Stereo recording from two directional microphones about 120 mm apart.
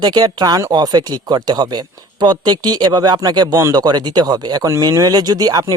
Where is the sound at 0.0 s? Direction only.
35° right (ahead or behind).